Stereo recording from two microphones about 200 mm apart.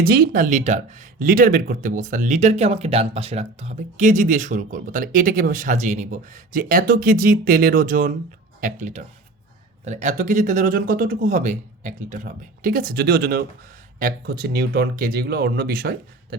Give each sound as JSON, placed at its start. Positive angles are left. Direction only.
{"t": 0.0, "sound": "speech", "side_deg": -50}